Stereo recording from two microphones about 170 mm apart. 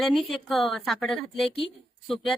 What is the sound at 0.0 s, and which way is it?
Speech, centre (ahead or behind).